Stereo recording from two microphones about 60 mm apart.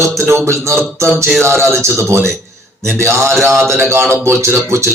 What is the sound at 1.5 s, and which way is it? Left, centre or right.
Speech, right.